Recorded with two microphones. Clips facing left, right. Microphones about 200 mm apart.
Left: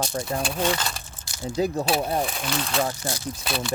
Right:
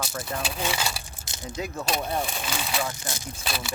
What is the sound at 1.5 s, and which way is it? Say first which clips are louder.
Speech: left 9 dB; 35° left (ahead or behind).